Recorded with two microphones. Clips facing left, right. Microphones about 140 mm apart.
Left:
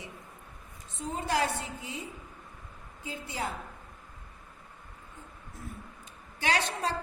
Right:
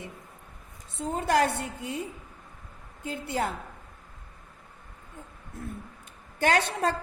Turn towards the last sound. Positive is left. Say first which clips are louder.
# right 5 dB
turn(degrees=-50)  # may be behind; listen again after turning